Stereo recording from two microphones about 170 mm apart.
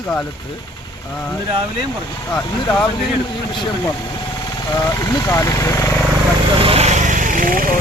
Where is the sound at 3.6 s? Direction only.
25° left (ahead or behind).